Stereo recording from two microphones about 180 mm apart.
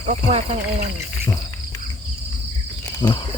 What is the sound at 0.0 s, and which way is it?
Speech, 40° right (ahead or behind).